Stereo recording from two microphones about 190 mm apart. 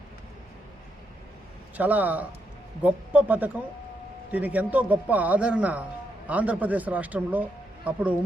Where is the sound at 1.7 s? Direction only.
10° right (ahead or behind).